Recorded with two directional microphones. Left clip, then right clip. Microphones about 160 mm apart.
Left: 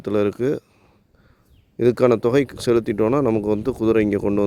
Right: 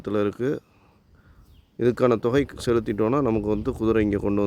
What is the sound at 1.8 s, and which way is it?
Speech, 30° left (ahead or behind).